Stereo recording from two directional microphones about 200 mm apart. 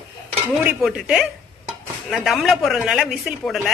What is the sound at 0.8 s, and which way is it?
A woman's voice, 5° right (ahead or behind).